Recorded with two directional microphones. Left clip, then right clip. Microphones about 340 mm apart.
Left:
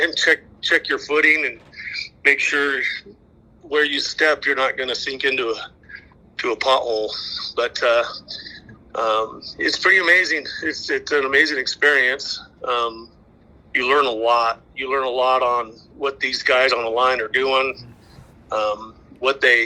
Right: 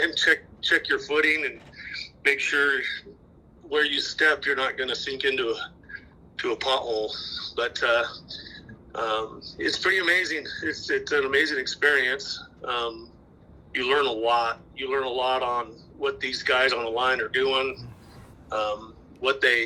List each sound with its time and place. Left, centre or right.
0.7 s speech: centre
8.3 s a sound: centre
8.9 s speech: centre
10.4 s speech: centre
10.8 s a man's voice: centre